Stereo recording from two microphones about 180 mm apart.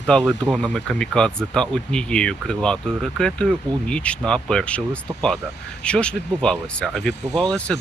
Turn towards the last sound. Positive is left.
turn(degrees=5)  # may be behind; listen again after turning